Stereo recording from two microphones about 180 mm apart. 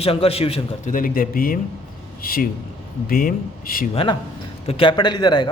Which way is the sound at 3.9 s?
30° left (ahead or behind).